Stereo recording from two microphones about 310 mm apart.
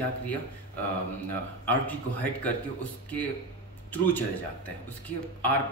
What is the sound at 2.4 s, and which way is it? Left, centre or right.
Speech, centre.